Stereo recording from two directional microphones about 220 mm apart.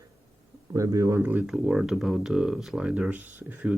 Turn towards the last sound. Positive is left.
turn(degrees=-5)  # may be behind; listen again after turning